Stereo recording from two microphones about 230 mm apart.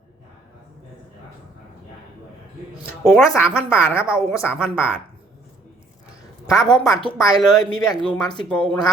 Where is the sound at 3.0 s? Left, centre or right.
Centre.